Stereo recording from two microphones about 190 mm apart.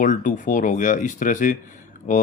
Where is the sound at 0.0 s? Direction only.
40° left (ahead or behind).